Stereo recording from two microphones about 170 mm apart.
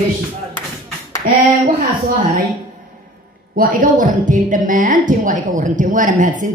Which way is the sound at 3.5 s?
55° right (ahead or behind).